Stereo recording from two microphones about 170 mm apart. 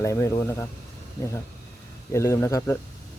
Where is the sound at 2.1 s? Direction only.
15° left (ahead or behind).